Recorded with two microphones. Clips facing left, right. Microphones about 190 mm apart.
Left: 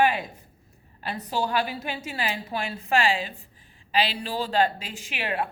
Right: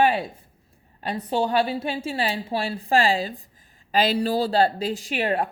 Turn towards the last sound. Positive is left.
turn(degrees=-40)  # may be behind; listen again after turning